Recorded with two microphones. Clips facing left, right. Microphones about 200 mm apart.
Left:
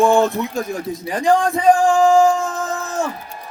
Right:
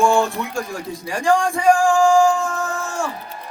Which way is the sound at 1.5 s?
20° left (ahead or behind).